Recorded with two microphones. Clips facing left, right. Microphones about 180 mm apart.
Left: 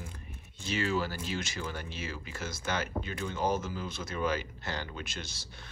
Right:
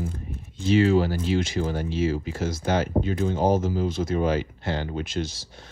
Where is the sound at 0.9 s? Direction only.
50° right (ahead or behind).